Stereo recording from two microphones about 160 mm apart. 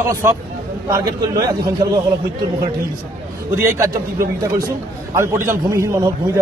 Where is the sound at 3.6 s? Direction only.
15° right (ahead or behind).